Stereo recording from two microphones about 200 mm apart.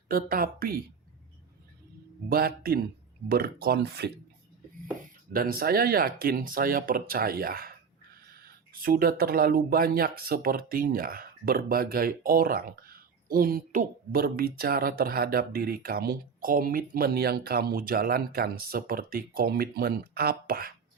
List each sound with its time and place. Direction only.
0.1 s speech: 45° right (ahead or behind)
2.3 s speech: 50° right (ahead or behind)
5.3 s speech: 45° right (ahead or behind)